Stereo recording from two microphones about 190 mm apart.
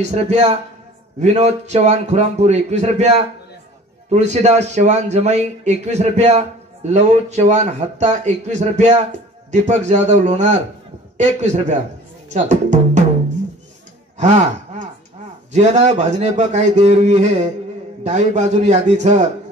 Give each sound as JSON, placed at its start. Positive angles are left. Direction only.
{"t": 0.0, "sound": "a man's voice", "side_deg": -35}
{"t": 4.1, "sound": "a man's voice", "side_deg": -35}
{"t": 14.1, "sound": "a man's voice", "side_deg": -40}